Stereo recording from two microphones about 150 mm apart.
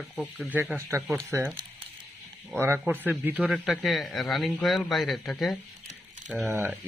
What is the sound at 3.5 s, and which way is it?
A man's voice, centre (ahead or behind).